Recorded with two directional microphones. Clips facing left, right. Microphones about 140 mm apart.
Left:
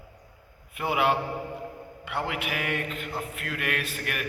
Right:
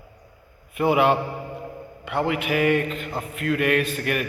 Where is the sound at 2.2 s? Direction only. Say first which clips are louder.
Right 12 dB; 5° left (ahead or behind).